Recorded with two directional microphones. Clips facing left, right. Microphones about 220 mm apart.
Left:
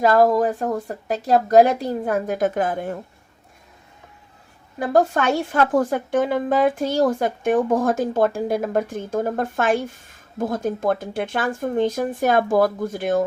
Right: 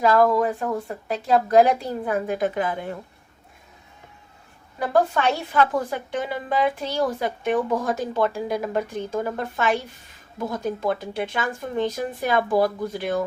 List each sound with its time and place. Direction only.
0.0 s a woman's voice: 40° left (ahead or behind)
4.9 s a woman's voice: 45° left (ahead or behind)